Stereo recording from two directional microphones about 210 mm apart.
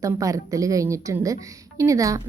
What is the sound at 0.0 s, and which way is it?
Speech, 15° right (ahead or behind).